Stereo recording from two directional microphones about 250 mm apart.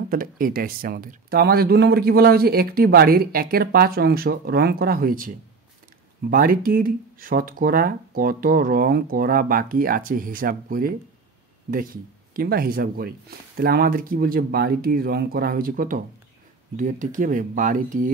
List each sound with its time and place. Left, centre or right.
0.1 s speech: right
6.3 s speech: right